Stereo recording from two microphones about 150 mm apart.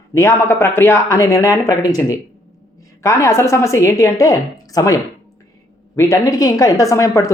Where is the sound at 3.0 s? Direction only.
20° left (ahead or behind).